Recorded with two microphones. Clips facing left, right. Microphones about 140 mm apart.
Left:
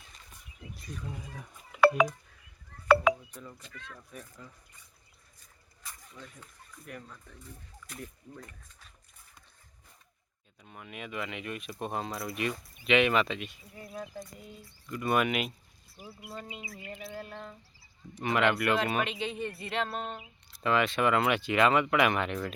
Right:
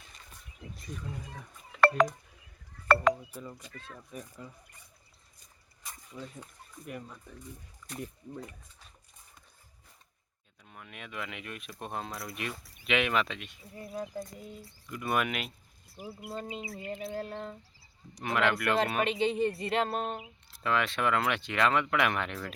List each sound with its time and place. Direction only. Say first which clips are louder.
0.8 s speech: even; centre (ahead or behind)
1.7 s telephone dialing: left 1 dB; 10° left (ahead or behind)
2.8 s a sound: left 2 dB; 5° left (ahead or behind)
3.7 s bird: right 1 dB; 35° right (ahead or behind)
4.1 s speech: right 6 dB; 15° right (ahead or behind)
5.8 s a sound: right 4 dB; 20° right (ahead or behind)
6.8 s speech: right 3 dB; 10° right (ahead or behind)
10.6 s speech: left 4 dB; 5° left (ahead or behind)
13.9 s speech: right 4 dB; 10° right (ahead or behind)
16.3 s bird: right 4 dB; 35° right (ahead or behind)
18.2 s speech: left 2 dB; centre (ahead or behind)
19.2 s bird: right 7 dB; 30° right (ahead or behind); by 20.2 s 45° right (ahead or behind)
20.2 s speech: left 2 dB; centre (ahead or behind)